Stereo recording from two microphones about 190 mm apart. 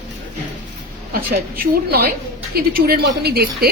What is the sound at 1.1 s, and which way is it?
A woman's voice, 55° right (ahead or behind).